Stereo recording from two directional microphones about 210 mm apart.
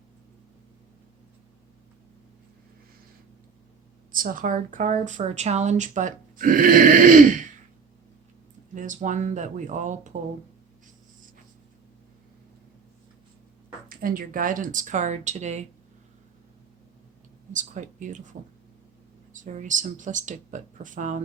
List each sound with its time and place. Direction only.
4.1 s a woman's voice: 40° right (ahead or behind)
8.7 s a woman's voice: 35° right (ahead or behind)
13.8 s a woman's voice: 40° right (ahead or behind)
17.5 s a woman's voice: 35° right (ahead or behind)